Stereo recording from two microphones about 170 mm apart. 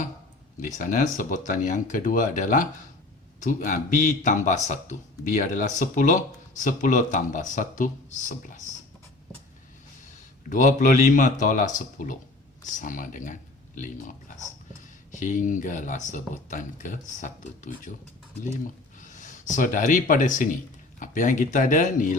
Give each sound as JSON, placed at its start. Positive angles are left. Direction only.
{"t": 0.6, "sound": "speech", "side_deg": 50}
{"t": 10.5, "sound": "speech", "side_deg": 50}
{"t": 18.9, "sound": "speech", "side_deg": 50}